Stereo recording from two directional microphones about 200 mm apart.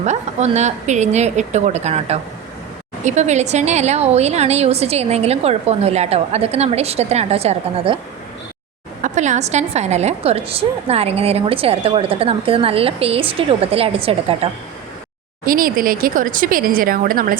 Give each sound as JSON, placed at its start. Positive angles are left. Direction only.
{"t": 0.0, "sound": "a woman's voice", "side_deg": -35}
{"t": 9.0, "sound": "a woman's voice", "side_deg": -35}
{"t": 15.4, "sound": "speech", "side_deg": -45}